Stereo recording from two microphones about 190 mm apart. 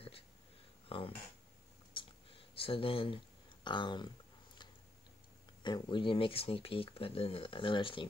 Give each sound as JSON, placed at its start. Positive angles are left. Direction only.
{"t": 0.8, "sound": "speech", "side_deg": 30}
{"t": 2.0, "sound": "a sound", "side_deg": 30}
{"t": 3.6, "sound": "speech", "side_deg": 25}
{"t": 5.6, "sound": "speech", "side_deg": 25}